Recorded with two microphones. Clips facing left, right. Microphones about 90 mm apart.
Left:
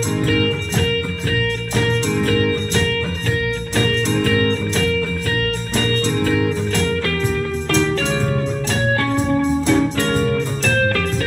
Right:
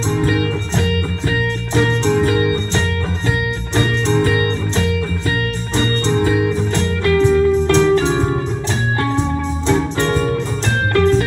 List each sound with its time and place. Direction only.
0.1 s music: 25° right (ahead or behind)
9.7 s music: 30° right (ahead or behind)